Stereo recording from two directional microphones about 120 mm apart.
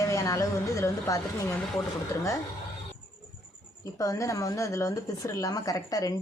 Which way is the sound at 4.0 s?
25° left (ahead or behind).